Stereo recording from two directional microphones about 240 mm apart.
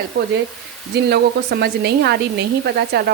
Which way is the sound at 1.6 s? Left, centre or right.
Right.